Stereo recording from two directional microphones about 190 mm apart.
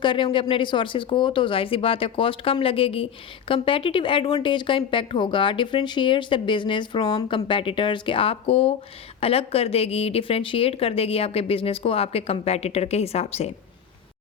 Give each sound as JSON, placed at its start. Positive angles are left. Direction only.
{"t": 0.0, "sound": "a woman's voice", "side_deg": 25}